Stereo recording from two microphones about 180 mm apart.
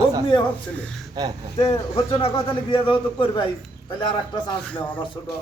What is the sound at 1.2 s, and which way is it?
Speech, 20° right (ahead or behind).